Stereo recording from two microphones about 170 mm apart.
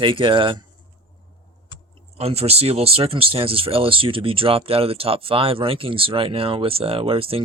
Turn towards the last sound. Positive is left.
turn(degrees=-35)  # may be behind; listen again after turning